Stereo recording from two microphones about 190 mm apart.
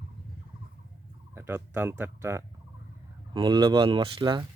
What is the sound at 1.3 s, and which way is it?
Speech, 10° right (ahead or behind).